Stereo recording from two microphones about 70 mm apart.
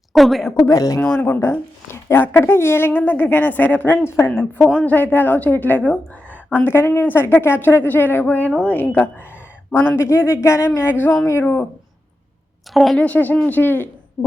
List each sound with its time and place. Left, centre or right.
0.1 s a woman's voice: centre
0.7 s speech: left
1.0 s a woman's voice: left
10.0 s speech: left
10.8 s a woman's voice: left
12.7 s a woman's voice: centre
13.0 s a woman's voice: left